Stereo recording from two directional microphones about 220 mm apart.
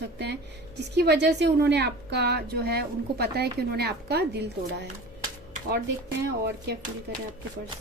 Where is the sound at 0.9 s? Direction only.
50° right (ahead or behind).